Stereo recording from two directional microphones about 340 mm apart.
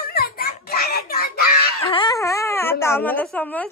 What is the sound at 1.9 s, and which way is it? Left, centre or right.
Speech, centre.